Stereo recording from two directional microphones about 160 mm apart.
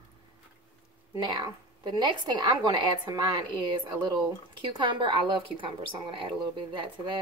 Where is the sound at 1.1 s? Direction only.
30° right (ahead or behind).